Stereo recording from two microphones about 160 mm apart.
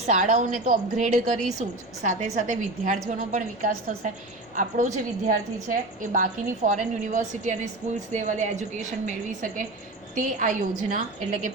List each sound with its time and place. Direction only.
0.1 s a woman's voice: 50° right (ahead or behind)
10.2 s a woman's voice: 55° right (ahead or behind)